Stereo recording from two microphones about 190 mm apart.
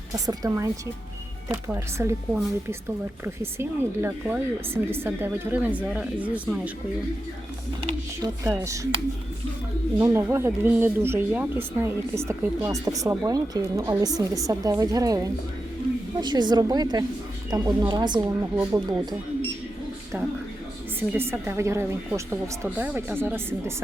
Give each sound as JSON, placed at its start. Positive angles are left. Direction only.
{"t": 0.1, "sound": "speech", "side_deg": -20}
{"t": 7.8, "sound": "a woman's voice", "side_deg": -25}
{"t": 8.4, "sound": "speech", "side_deg": -15}
{"t": 10.0, "sound": "a woman's voice", "side_deg": -15}
{"t": 18.5, "sound": "speech", "side_deg": -10}
{"t": 21.1, "sound": "speech", "side_deg": -10}